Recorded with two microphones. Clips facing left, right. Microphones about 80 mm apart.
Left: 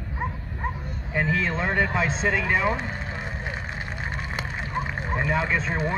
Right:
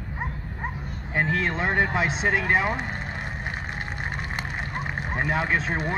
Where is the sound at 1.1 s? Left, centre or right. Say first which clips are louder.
Even; right.